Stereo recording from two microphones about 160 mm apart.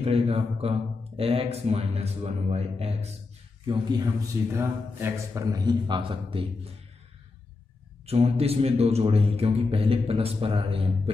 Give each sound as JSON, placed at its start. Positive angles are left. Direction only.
{"t": 0.0, "sound": "speech", "side_deg": -40}
{"t": 3.6, "sound": "speech", "side_deg": -25}
{"t": 8.1, "sound": "speech", "side_deg": -40}